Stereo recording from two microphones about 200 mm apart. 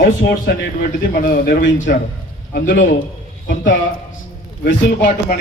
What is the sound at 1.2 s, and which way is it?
A man's voice, 45° left (ahead or behind).